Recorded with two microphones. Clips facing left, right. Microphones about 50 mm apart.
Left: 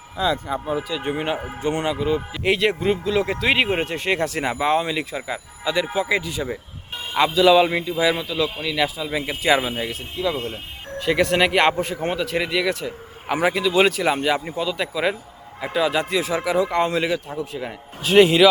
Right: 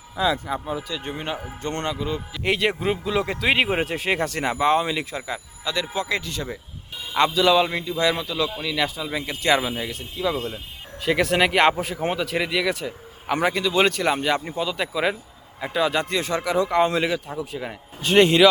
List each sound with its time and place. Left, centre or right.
0.2 s speech: centre
0.9 s speech: centre
2.4 s speech: centre
5.6 s speech: centre
6.9 s music: left
7.3 s speech: centre
11.0 s speech: centre